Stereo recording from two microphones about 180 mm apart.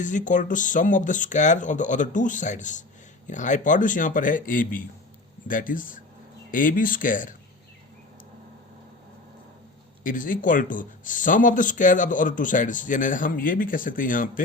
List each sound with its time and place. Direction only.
0.0 s speech: 45° left (ahead or behind)
10.0 s speech: 50° left (ahead or behind)